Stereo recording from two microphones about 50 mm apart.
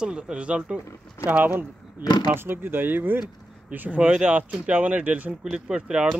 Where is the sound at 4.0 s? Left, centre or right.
Right.